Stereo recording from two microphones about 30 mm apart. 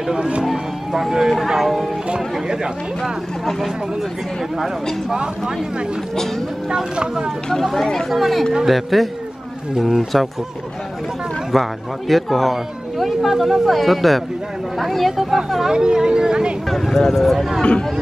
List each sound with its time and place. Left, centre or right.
0.2 s speech: right
0.5 s speech: centre
2.4 s a woman's voice: right
3.4 s speech: centre
6.7 s a woman's voice: right
7.7 s speech: centre
8.1 s speech: centre
11.5 s speech: centre
15.7 s a woman's voice: right
16.9 s speech: centre